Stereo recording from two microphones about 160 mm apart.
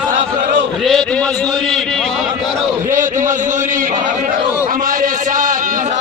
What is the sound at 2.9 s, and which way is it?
Speech, 55° right (ahead or behind).